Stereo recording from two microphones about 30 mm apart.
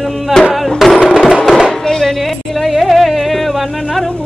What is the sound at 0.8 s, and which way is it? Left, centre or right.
Music, centre.